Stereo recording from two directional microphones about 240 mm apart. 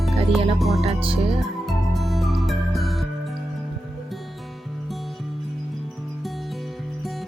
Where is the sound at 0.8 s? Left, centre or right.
Right.